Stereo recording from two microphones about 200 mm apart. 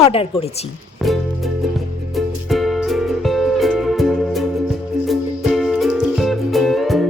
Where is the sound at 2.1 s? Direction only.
Centre (ahead or behind).